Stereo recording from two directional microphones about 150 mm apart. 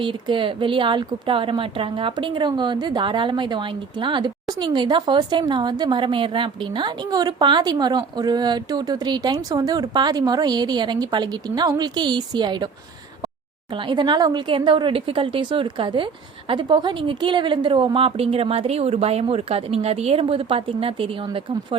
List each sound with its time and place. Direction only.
0.0 s a woman's voice: 35° right (ahead or behind)
13.7 s a woman's voice: 30° right (ahead or behind)